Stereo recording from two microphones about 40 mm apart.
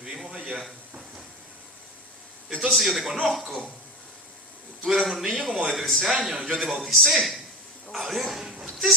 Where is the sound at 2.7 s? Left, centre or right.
Centre.